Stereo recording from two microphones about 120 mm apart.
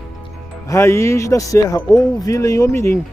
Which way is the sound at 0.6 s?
25° left (ahead or behind).